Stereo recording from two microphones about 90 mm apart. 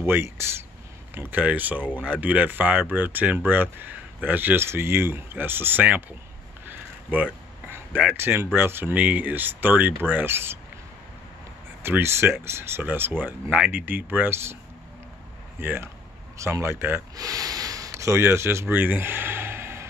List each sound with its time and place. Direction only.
0.0 s speech: 25° right (ahead or behind)
8.2 s speech: 25° right (ahead or behind)
11.8 s speech: 25° right (ahead or behind)
15.6 s speech: 25° right (ahead or behind)
17.1 s speech: 40° right (ahead or behind); by 19.9 s 25° right (ahead or behind)